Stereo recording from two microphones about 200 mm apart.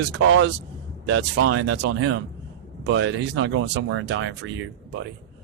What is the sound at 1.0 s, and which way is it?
A man's voice, 70° right (ahead or behind).